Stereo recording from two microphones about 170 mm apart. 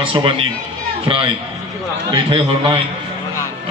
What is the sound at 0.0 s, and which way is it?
Speech, 30° right (ahead or behind).